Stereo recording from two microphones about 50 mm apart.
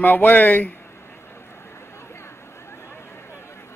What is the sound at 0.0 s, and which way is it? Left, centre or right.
Speech, left.